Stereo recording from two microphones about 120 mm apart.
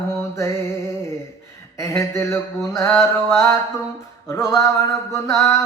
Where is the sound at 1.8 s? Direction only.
20° left (ahead or behind).